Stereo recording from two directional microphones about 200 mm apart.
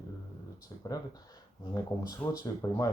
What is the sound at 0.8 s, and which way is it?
Speech, 20° left (ahead or behind).